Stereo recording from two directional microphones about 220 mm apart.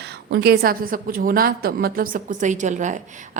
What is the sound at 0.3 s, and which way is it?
A woman's voice, 50° right (ahead or behind).